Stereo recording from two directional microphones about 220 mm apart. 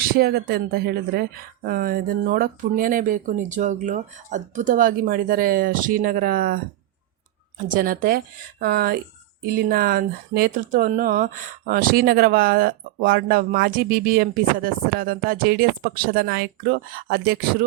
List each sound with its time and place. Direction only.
0.0 s speech: 45° right (ahead or behind)
7.7 s speech: 40° right (ahead or behind)